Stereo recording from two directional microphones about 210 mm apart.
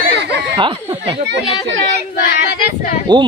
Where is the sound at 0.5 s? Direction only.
25° right (ahead or behind).